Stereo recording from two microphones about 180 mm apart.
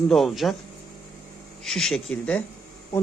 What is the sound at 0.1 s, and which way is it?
Speech, centre (ahead or behind).